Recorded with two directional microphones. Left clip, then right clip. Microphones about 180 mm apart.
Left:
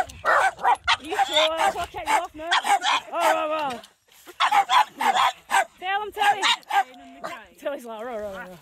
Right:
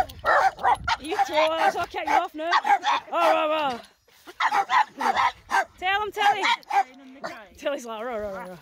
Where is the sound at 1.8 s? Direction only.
40° right (ahead or behind).